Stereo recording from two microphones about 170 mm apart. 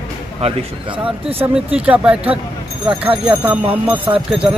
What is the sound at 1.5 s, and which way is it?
Speech, 5° right (ahead or behind).